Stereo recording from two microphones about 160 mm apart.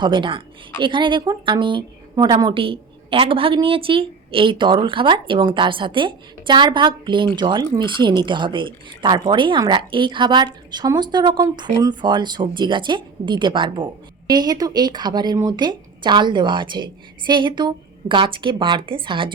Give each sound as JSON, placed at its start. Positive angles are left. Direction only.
{"t": 0.0, "sound": "speech", "side_deg": -30}